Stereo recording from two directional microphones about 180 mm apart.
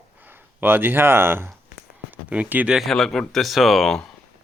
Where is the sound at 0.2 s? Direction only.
10° right (ahead or behind).